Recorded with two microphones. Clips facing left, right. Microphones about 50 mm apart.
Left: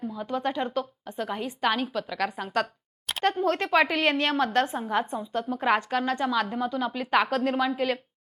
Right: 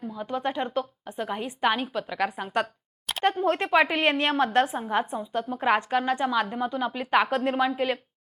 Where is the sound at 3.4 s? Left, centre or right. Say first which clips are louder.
Right 1 dB; centre.